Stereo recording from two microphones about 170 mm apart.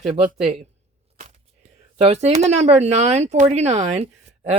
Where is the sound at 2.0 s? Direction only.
40° right (ahead or behind).